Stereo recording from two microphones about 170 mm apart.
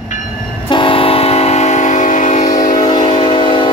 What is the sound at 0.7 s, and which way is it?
Train, 30° left (ahead or behind).